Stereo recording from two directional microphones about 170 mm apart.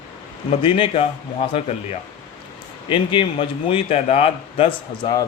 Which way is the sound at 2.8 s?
30° left (ahead or behind).